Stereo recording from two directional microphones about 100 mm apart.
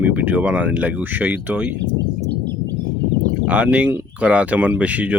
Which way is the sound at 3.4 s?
10° right (ahead or behind).